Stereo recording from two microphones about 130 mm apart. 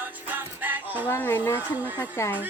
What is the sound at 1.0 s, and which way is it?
Speech, 15° left (ahead or behind).